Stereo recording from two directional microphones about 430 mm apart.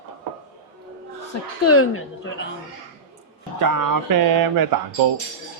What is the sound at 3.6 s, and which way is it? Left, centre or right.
Speech, right.